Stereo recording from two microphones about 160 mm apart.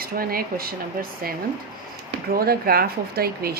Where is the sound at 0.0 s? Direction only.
65° right (ahead or behind).